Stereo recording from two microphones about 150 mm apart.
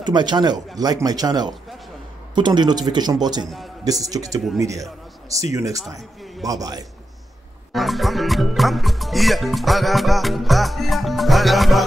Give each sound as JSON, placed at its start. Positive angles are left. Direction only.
{"t": 0.0, "sound": "a man's voice", "side_deg": -30}
{"t": 3.4, "sound": "music", "side_deg": 0}
{"t": 3.8, "sound": "a man's voice", "side_deg": -25}
{"t": 7.7, "sound": "music", "side_deg": 0}